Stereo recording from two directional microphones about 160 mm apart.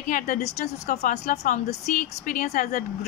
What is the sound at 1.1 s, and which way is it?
A woman's voice, 55° left (ahead or behind).